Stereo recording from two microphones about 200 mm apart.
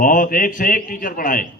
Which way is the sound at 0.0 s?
45° left (ahead or behind).